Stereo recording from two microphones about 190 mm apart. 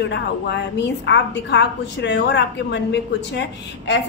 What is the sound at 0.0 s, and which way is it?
A woman's voice, 65° left (ahead or behind).